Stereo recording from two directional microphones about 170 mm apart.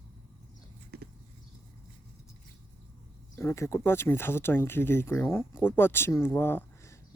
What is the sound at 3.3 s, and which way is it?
Speech, 15° left (ahead or behind).